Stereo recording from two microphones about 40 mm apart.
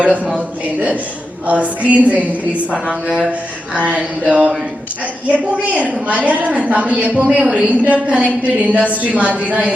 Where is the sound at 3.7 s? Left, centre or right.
Right.